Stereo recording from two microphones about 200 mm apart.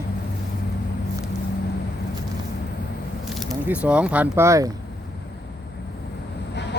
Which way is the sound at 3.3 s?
5° right (ahead or behind).